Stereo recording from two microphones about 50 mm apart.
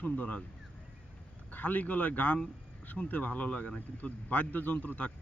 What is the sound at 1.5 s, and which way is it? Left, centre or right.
Speech, left.